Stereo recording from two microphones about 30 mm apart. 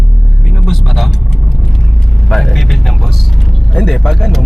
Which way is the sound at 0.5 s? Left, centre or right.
Centre.